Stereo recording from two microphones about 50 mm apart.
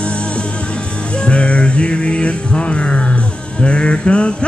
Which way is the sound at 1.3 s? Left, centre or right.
Left.